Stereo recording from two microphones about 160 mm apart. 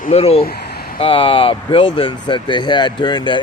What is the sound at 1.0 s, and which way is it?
Speech, 35° left (ahead or behind).